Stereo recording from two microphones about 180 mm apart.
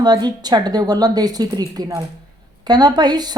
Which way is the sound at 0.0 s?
25° right (ahead or behind).